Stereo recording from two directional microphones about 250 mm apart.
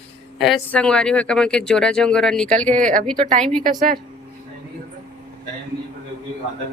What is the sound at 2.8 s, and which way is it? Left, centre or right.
A woman's voice, right.